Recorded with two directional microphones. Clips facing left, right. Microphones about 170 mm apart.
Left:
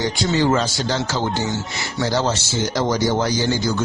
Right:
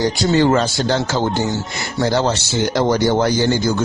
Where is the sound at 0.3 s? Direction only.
55° right (ahead or behind).